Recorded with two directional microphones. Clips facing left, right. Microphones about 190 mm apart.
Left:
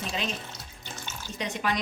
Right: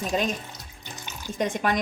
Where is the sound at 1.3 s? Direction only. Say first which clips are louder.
Right 5 dB; 50° right (ahead or behind).